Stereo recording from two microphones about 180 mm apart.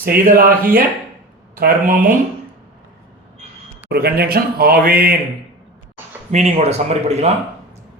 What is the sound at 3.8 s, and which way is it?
A man's voice, 60° right (ahead or behind).